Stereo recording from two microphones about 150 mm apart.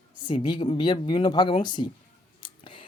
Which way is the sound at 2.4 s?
35° left (ahead or behind).